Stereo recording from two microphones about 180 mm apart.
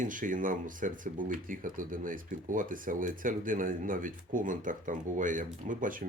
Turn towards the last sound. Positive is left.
turn(degrees=-45)  # may be behind; listen again after turning